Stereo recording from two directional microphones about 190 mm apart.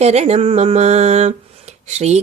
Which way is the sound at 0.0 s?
35° right (ahead or behind).